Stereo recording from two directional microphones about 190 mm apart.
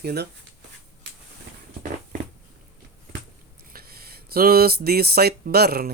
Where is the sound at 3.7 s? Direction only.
55° right (ahead or behind).